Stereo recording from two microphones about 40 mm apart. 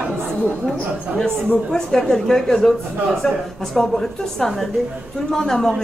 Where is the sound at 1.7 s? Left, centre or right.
Centre.